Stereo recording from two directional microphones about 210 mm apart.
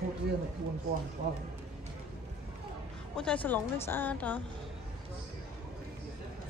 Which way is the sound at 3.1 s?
5° left (ahead or behind).